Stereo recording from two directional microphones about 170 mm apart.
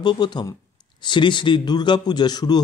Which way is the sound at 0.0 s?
25° left (ahead or behind).